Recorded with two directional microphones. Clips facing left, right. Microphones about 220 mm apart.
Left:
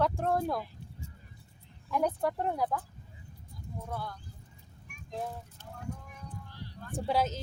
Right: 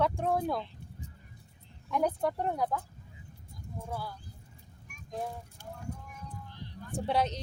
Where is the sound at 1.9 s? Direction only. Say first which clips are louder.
Even; centre (ahead or behind).